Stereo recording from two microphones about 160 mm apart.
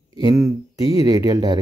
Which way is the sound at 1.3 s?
25° right (ahead or behind).